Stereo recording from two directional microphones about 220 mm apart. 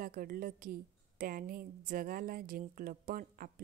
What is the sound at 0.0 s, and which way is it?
A woman's voice, 40° right (ahead or behind).